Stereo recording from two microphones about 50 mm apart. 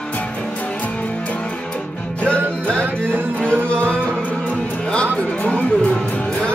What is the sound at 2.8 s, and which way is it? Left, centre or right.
Music, right.